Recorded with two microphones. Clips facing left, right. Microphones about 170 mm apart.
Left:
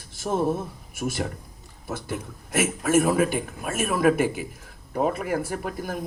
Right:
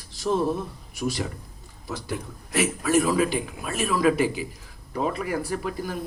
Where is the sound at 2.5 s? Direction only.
50° left (ahead or behind).